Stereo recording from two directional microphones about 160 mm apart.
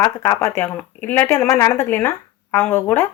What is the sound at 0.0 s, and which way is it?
Speech, 15° left (ahead or behind).